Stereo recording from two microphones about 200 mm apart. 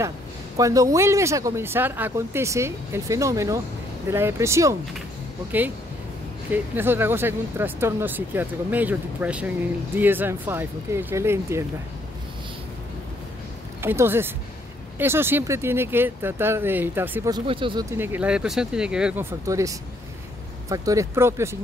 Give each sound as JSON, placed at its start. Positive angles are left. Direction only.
{"t": 0.6, "sound": "speech", "side_deg": -15}
{"t": 6.5, "sound": "speech", "side_deg": -10}
{"t": 13.7, "sound": "speech", "side_deg": -10}
{"t": 17.3, "sound": "speech", "side_deg": -25}
{"t": 19.4, "sound": "speech", "side_deg": -15}